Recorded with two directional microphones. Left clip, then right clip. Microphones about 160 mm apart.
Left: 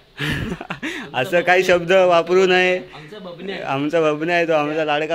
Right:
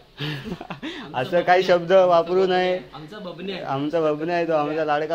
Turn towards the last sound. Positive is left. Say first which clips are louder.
# left 3 dB
turn(degrees=45)  # may be behind; listen again after turning